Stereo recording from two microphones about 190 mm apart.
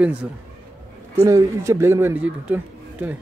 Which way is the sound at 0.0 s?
5° right (ahead or behind).